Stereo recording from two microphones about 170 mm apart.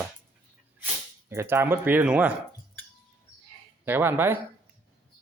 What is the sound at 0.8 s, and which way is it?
Speech, 15° right (ahead or behind).